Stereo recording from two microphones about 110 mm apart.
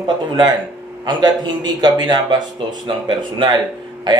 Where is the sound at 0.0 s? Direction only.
40° right (ahead or behind).